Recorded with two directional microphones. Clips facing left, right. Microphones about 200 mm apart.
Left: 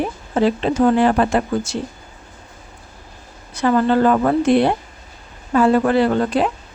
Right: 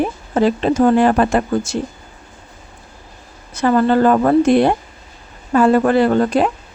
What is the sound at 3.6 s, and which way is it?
Speech, 45° right (ahead or behind).